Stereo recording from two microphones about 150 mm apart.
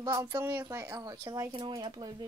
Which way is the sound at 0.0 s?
25° right (ahead or behind).